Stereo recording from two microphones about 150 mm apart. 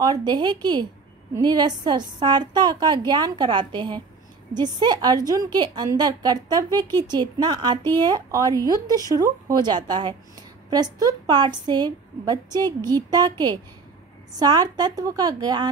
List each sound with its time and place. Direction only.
0.0 s a woman's voice: 25° right (ahead or behind)